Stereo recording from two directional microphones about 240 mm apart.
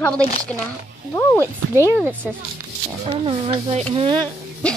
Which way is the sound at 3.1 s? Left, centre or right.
Right.